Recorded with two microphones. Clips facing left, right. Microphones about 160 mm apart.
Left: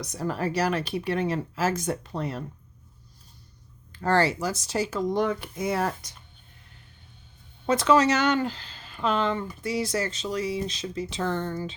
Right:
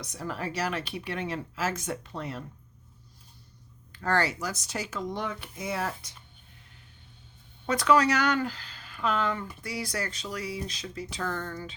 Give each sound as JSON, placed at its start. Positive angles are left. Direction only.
{"t": 0.0, "sound": "speech", "side_deg": 40}
{"t": 3.9, "sound": "speech", "side_deg": 30}
{"t": 7.7, "sound": "speech", "side_deg": 25}